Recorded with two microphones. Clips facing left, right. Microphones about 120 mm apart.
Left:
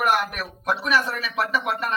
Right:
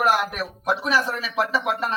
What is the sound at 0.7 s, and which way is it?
Speech, 30° right (ahead or behind).